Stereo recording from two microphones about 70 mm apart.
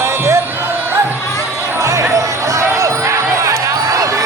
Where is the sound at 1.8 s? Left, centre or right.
Right.